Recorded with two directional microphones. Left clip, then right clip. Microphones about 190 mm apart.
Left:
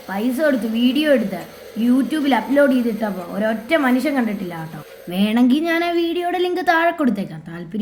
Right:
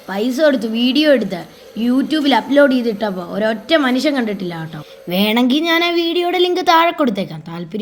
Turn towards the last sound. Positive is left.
turn(degrees=-30)  # may be behind; listen again after turning